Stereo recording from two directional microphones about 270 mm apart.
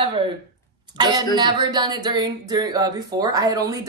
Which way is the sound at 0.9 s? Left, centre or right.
Centre.